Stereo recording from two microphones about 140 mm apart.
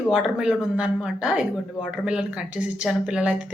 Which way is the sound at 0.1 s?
5° right (ahead or behind).